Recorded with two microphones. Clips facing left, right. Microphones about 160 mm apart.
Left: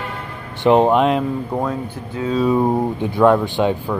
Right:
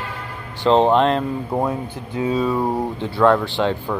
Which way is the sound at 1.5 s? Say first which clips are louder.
Even; 15° right (ahead or behind).